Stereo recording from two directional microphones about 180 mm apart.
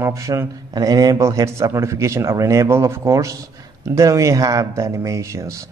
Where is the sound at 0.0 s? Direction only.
15° right (ahead or behind).